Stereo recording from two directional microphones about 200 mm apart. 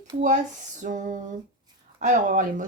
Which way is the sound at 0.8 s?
40° right (ahead or behind).